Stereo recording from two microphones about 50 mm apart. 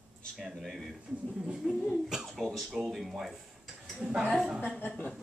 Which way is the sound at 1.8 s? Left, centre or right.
Centre.